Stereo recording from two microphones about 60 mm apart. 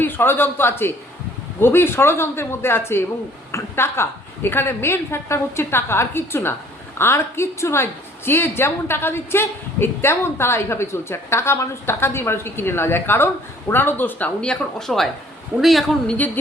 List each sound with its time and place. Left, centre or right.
0.0 s a woman's voice: left
14.4 s a woman's voice: centre
16.1 s a woman's voice: left